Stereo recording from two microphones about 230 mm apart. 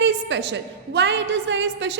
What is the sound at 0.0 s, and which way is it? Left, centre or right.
A woman's voice, right.